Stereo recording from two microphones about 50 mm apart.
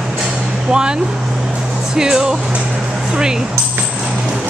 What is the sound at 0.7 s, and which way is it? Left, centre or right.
Speech, centre.